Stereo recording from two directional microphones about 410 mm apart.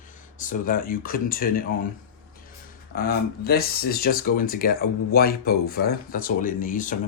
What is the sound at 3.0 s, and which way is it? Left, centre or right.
Speech, left.